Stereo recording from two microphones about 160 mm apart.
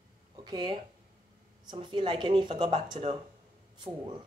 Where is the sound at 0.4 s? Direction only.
30° right (ahead or behind).